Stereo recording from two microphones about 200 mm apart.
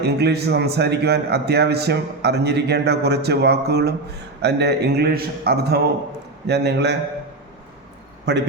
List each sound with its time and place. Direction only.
0.0 s a man's voice: 55° right (ahead or behind)
8.2 s a man's voice: 60° right (ahead or behind)